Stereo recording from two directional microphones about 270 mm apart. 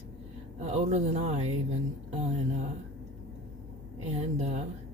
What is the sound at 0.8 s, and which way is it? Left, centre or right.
Speech, right.